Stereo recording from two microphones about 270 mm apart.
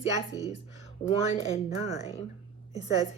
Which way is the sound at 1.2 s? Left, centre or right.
Left.